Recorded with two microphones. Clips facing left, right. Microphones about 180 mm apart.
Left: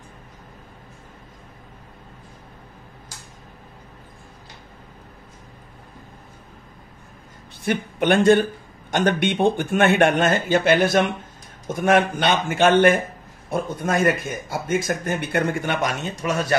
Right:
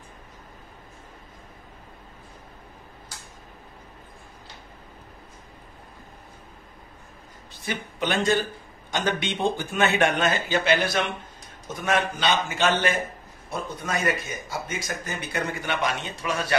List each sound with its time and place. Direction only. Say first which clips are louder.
7.6 s a man's voice: left 8 dB; 55° left (ahead or behind)